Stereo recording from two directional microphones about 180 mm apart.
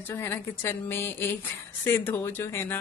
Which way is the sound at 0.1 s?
15° left (ahead or behind).